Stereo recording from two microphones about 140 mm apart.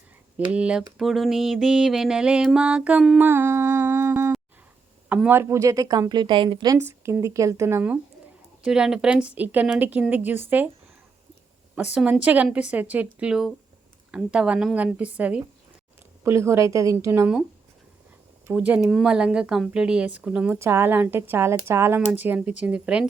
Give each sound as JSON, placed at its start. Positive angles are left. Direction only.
{"t": 0.5, "sound": "speech", "side_deg": -5}
{"t": 0.9, "sound": "music", "side_deg": 0}
{"t": 3.2, "sound": "humming", "side_deg": -15}
{"t": 5.0, "sound": "a woman's voice", "side_deg": -10}
{"t": 6.7, "sound": "a woman's voice", "side_deg": -20}
{"t": 8.6, "sound": "speech", "side_deg": -5}
{"t": 11.7, "sound": "speech", "side_deg": -10}
{"t": 16.2, "sound": "a woman's voice", "side_deg": -20}
{"t": 18.4, "sound": "speech", "side_deg": -10}
{"t": 20.6, "sound": "speech", "side_deg": -20}